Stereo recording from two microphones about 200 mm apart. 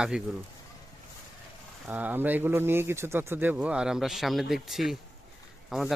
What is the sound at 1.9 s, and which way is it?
Speech, 10° right (ahead or behind).